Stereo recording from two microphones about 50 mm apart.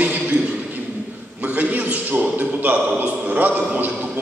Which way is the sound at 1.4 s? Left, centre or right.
Right.